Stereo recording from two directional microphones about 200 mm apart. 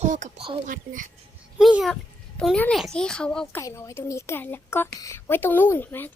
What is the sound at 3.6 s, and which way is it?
A woman's voice, 15° left (ahead or behind).